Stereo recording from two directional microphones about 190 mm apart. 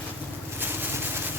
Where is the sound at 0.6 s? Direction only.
10° right (ahead or behind).